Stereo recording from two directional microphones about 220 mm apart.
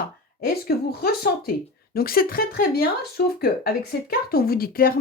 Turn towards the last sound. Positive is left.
turn(degrees=40)  # may be behind; listen again after turning